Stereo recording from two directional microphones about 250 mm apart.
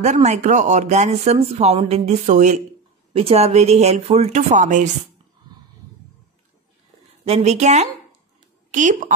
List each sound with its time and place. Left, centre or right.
0.0 s speech: right
7.2 s speech: right